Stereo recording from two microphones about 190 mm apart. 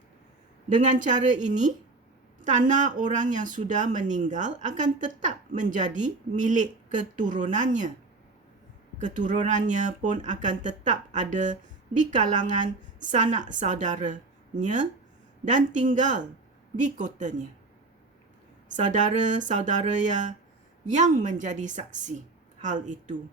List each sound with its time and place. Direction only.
0.8 s a woman's voice: 40° right (ahead or behind)
9.0 s a woman's voice: 40° right (ahead or behind)
18.7 s a woman's voice: 40° right (ahead or behind)